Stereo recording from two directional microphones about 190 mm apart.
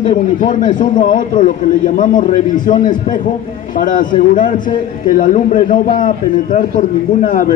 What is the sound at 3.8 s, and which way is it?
A man's voice, 45° left (ahead or behind).